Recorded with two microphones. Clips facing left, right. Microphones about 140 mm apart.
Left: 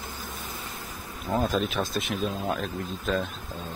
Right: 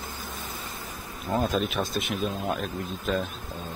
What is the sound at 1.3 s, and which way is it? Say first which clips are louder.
Speech: even; centre (ahead or behind).